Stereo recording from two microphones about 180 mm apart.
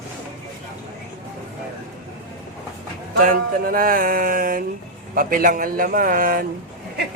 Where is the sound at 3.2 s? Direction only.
50° right (ahead or behind).